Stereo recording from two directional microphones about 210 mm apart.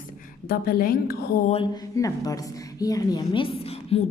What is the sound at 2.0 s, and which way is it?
A woman's voice, 15° left (ahead or behind).